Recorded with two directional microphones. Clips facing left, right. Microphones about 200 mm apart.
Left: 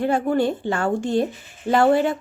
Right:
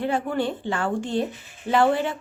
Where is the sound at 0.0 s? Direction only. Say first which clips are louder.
Left 5 dB; 45° left (ahead or behind).